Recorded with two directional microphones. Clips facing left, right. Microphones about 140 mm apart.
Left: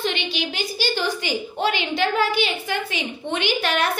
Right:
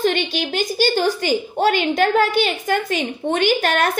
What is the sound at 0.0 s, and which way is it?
A woman's voice, 45° right (ahead or behind).